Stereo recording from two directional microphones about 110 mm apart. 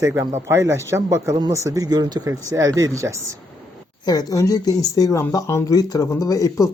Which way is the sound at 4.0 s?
35° left (ahead or behind).